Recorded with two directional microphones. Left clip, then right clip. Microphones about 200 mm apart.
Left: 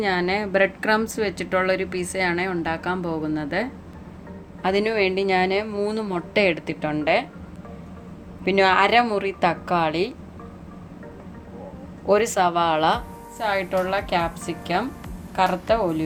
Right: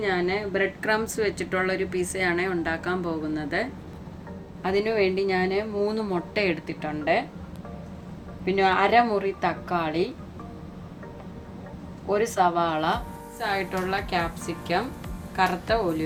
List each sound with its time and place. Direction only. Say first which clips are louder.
0.0 s a woman's voice: left 3 dB; 45° left (ahead or behind)
8.4 s a woman's voice: left 4 dB; 50° left (ahead or behind)
12.0 s a woman's voice: left 4 dB; 50° left (ahead or behind)